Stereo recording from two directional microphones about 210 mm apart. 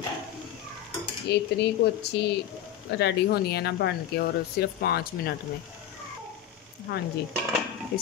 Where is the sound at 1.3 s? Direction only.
50° left (ahead or behind).